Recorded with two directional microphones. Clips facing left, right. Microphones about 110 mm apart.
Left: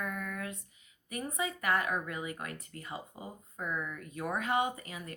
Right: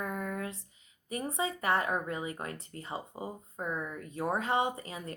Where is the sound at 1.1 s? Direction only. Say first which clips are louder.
Right 3 dB; 30° right (ahead or behind).